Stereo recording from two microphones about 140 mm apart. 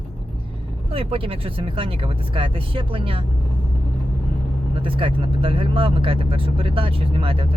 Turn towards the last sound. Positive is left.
turn(degrees=-40)  # may be behind; listen again after turning